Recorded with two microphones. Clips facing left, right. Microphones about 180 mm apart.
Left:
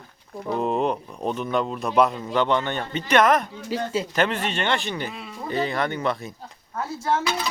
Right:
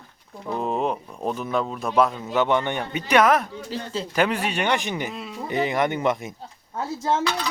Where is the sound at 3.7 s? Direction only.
10° left (ahead or behind).